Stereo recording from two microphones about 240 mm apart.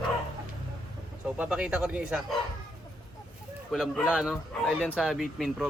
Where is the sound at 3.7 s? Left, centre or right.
Centre.